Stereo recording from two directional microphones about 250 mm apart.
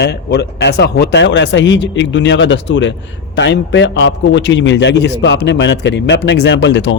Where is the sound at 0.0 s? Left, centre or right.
Left.